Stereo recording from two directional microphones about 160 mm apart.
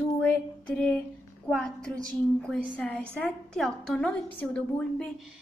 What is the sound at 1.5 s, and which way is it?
A woman's voice, 5° left (ahead or behind).